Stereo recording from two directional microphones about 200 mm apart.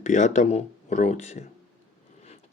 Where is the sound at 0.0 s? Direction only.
35° left (ahead or behind).